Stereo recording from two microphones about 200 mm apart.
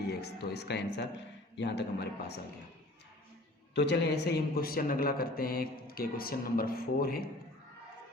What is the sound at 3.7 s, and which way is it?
Speech, 60° left (ahead or behind).